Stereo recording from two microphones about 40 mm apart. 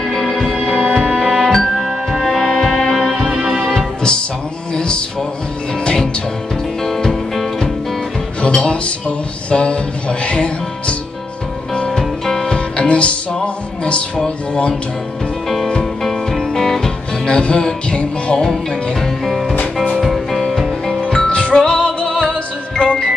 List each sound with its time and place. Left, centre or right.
0.0 s music: centre
0.8 s music: centre
1.2 s music: centre
6.8 s music: centre
8.4 s a man's voice: left
11.7 s music: left
12.0 s music: centre
12.5 s music: left
15.4 s music: centre
17.3 s music: left
18.4 s music: centre
19.5 s music: left
20.0 s music: centre
21.3 s music: left